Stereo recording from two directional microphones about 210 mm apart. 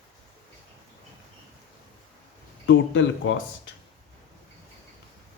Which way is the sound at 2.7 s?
65° left (ahead or behind).